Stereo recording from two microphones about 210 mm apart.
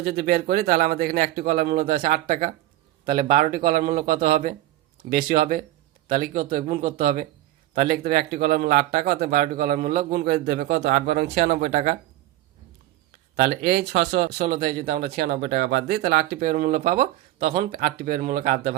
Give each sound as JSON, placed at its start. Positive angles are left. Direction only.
{"t": 0.0, "sound": "a man's voice", "side_deg": -50}
{"t": 13.3, "sound": "speech", "side_deg": -50}